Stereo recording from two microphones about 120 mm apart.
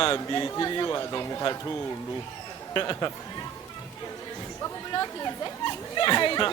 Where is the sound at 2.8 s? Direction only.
30° left (ahead or behind).